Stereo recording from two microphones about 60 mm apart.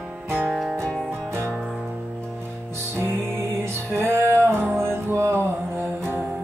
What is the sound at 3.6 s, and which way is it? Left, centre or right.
Music, right.